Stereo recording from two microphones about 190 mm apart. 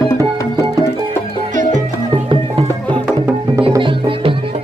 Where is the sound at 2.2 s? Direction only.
25° right (ahead or behind).